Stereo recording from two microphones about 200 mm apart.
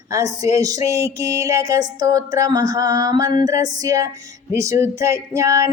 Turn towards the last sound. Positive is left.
turn(degrees=-15)  # may be behind; listen again after turning